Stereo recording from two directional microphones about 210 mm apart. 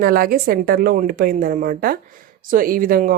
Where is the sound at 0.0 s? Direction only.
45° right (ahead or behind).